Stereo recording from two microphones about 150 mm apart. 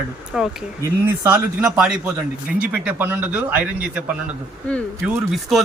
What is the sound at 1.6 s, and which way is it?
Speech, 5° right (ahead or behind).